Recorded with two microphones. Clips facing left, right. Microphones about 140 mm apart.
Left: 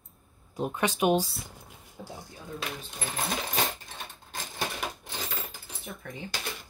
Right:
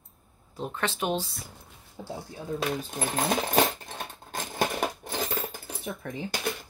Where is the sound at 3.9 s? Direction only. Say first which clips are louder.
Right 5 dB; 50° right (ahead or behind).